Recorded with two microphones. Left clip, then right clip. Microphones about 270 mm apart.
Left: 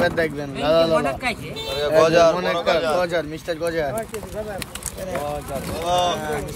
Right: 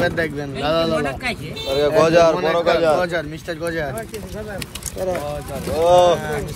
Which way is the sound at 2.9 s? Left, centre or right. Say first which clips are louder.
Right 1 dB; left.